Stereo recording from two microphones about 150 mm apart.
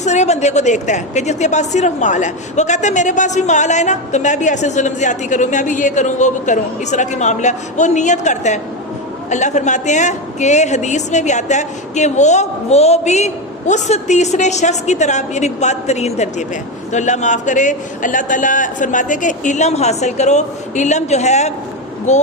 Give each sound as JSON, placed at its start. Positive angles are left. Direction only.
{"t": 0.0, "sound": "speech", "side_deg": 50}